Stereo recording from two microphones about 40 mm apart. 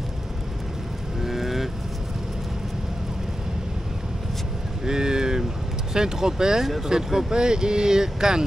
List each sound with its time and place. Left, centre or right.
1.2 s vehicle: centre
4.8 s a sound: centre
5.9 s speech: centre